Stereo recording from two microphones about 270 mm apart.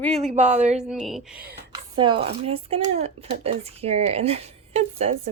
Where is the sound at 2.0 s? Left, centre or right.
Centre.